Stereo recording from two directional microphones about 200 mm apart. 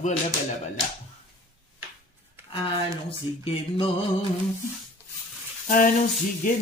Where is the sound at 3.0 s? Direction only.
25° left (ahead or behind).